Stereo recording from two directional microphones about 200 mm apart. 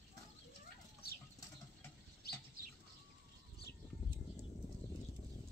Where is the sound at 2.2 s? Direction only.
55° left (ahead or behind).